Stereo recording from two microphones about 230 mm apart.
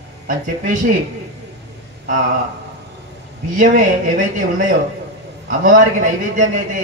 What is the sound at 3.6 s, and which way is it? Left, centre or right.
Speech, right.